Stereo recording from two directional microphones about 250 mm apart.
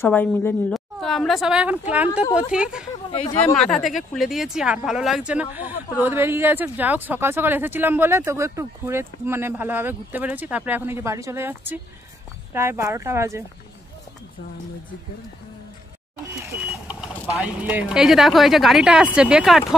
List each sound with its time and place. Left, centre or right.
0.0 s a woman's voice: centre
3.1 s speech: centre
3.5 s a woman's voice: centre
16.6 s a woman's voice: centre